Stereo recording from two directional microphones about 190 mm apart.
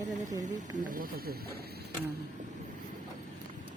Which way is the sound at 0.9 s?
50° right (ahead or behind).